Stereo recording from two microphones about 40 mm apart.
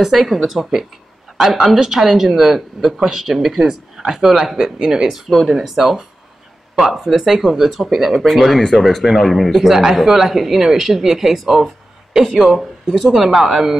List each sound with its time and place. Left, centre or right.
0.0 s speech: centre
5.0 s speech: centre
11.6 s a sound: centre
12.3 s speech: centre